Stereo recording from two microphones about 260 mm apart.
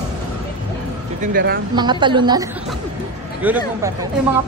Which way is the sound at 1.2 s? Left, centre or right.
Right.